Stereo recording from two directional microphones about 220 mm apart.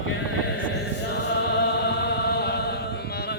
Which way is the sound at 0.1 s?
55° left (ahead or behind).